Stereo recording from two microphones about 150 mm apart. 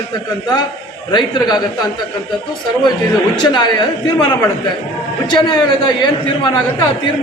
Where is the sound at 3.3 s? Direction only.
30° left (ahead or behind).